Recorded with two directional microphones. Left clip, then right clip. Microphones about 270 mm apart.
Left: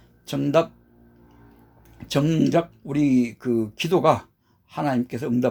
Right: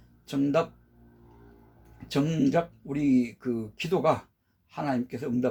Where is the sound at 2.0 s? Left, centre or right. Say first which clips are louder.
Left 5 dB; left.